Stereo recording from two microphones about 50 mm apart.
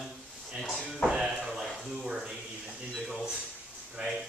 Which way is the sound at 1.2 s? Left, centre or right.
Centre.